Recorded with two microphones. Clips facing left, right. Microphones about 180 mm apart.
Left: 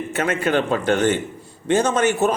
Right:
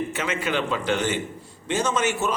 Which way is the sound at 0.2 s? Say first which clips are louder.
Left 8 dB; 55° left (ahead or behind).